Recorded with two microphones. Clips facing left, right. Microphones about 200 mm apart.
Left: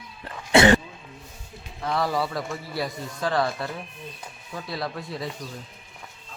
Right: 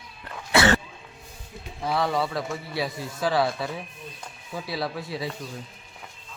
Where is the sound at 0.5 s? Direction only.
20° left (ahead or behind).